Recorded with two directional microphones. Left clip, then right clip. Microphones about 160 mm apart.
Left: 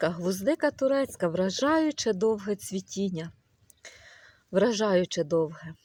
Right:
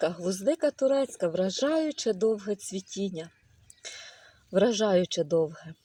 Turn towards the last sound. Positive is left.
turn(degrees=0)  # may be behind; listen again after turning